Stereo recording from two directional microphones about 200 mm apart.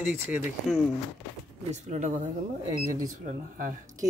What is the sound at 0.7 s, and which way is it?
Speech, centre (ahead or behind).